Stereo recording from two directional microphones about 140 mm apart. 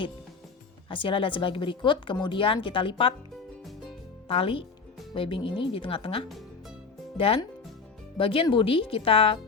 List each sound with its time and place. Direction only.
0.9 s speech: 40° left (ahead or behind)
4.3 s speech: 40° left (ahead or behind)